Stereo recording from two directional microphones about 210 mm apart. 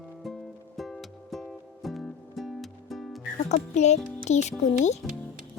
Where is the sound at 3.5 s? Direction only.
35° left (ahead or behind).